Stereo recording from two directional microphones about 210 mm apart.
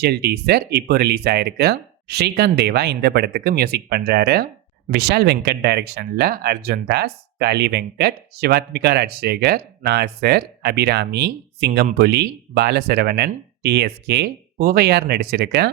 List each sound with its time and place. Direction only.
0.0 s speech: 50° right (ahead or behind)